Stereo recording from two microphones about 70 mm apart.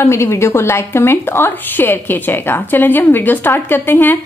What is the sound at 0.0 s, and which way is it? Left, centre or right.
A woman's voice, left.